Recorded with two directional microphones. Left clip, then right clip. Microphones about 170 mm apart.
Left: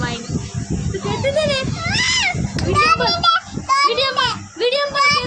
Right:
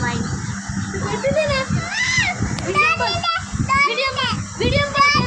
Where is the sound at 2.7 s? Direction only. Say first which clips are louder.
Left 2 dB; 20° left (ahead or behind).